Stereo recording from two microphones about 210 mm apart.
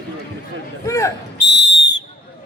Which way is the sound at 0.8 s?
15° left (ahead or behind).